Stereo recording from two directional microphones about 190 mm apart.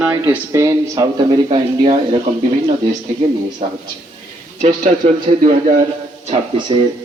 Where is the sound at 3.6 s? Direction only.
40° right (ahead or behind).